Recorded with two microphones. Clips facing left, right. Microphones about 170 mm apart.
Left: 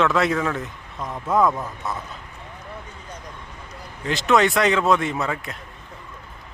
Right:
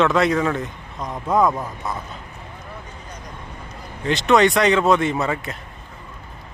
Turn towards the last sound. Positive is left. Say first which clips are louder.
# right 3 dB
turn(degrees=0)  # may be behind; listen again after turning